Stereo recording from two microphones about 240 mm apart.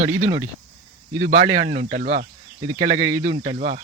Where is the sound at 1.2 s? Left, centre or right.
Right.